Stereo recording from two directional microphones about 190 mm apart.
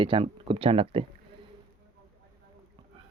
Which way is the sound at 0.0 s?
30° right (ahead or behind).